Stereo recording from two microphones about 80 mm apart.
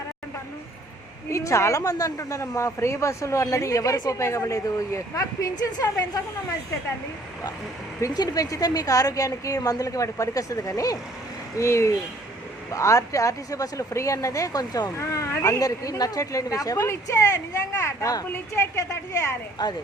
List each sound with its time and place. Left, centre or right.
1.3 s speech: left
4.2 s a woman's voice: left
8.1 s a woman's voice: left
18.5 s speech: left
19.6 s speech: left